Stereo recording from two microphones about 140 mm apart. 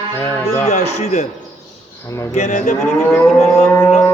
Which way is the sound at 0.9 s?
50° left (ahead or behind).